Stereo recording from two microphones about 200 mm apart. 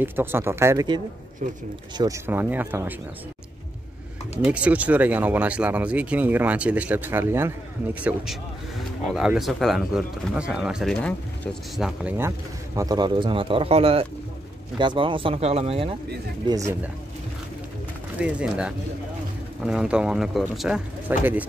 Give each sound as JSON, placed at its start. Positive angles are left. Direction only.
{"t": 0.0, "sound": "speech", "side_deg": -10}
{"t": 1.4, "sound": "speech", "side_deg": -40}
{"t": 2.0, "sound": "speech", "side_deg": -15}
{"t": 4.5, "sound": "speech", "side_deg": -5}
{"t": 16.4, "sound": "speech", "side_deg": -15}
{"t": 18.2, "sound": "speech", "side_deg": -5}